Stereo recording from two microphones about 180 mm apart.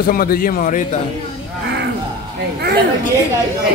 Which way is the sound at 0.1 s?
55° left (ahead or behind).